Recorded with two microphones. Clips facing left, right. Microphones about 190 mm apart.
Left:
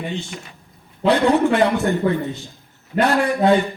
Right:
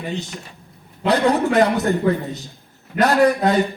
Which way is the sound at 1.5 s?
40° right (ahead or behind).